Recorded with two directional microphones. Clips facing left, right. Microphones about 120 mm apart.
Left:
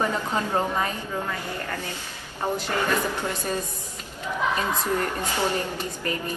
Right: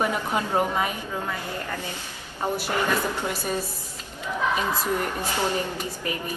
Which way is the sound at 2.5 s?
10° right (ahead or behind).